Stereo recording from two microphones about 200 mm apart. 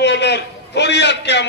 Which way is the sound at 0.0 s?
60° left (ahead or behind).